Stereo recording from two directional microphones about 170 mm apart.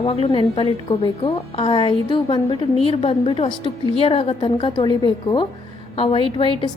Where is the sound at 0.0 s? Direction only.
35° left (ahead or behind).